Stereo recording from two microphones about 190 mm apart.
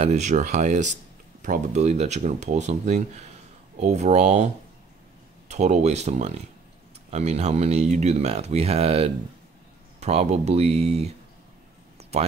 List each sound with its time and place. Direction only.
0.0 s speech: 35° right (ahead or behind)
5.5 s speech: 35° right (ahead or behind)
12.0 s a sound: 35° right (ahead or behind)